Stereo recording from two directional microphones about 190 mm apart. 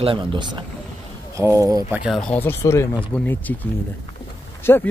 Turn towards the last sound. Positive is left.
turn(degrees=10)  # may be behind; listen again after turning